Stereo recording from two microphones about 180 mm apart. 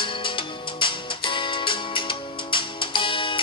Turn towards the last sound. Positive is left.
turn(degrees=30)  # may be behind; listen again after turning